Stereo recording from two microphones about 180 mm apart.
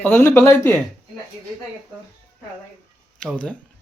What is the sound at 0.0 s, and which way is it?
Speech, 10° left (ahead or behind).